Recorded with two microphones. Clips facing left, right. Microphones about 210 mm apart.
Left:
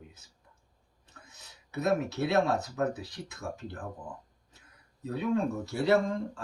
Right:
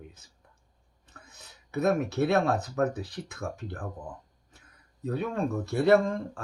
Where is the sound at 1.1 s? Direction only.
55° right (ahead or behind).